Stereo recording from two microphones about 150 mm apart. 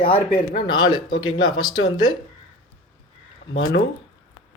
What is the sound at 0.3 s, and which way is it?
Speech, 30° left (ahead or behind).